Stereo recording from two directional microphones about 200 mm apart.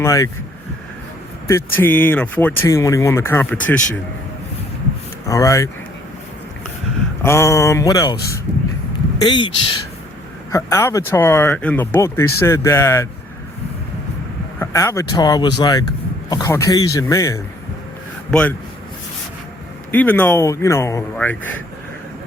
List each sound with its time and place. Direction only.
0.0 s speech: 15° left (ahead or behind)
1.5 s speech: 10° left (ahead or behind)
5.3 s speech: 15° left (ahead or behind)
7.2 s speech: 15° left (ahead or behind)
14.6 s speech: 15° left (ahead or behind)
19.9 s speech: 10° left (ahead or behind)